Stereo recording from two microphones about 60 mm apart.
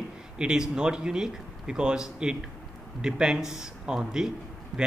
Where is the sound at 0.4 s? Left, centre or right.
Centre.